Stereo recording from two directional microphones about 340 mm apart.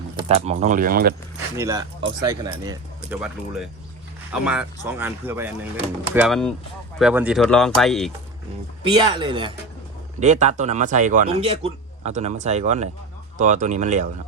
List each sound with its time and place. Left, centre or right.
0.3 s a man's voice: centre
1.5 s speech: centre
8.8 s a man's voice: centre